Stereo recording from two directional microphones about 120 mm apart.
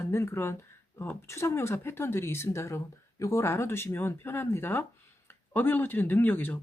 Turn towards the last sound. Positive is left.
turn(degrees=15)  # may be behind; listen again after turning